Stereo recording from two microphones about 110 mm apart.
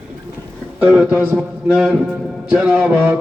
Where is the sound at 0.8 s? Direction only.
10° right (ahead or behind).